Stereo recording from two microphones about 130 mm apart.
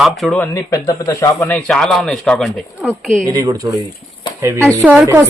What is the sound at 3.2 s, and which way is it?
Speech, 25° right (ahead or behind).